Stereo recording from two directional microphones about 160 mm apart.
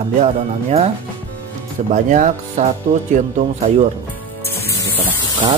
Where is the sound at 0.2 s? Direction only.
40° right (ahead or behind).